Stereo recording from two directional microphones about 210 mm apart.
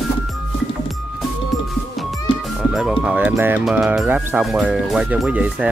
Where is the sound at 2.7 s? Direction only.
5° right (ahead or behind).